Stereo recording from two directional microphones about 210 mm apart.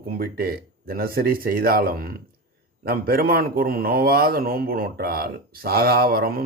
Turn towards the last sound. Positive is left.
turn(degrees=-45)  # may be behind; listen again after turning